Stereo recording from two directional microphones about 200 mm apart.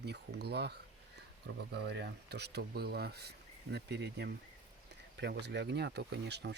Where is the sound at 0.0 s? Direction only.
55° right (ahead or behind).